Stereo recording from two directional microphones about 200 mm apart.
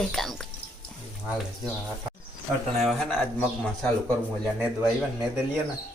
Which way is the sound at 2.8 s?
Centre (ahead or behind).